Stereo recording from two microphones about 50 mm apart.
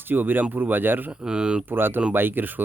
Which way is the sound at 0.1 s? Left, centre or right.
Right.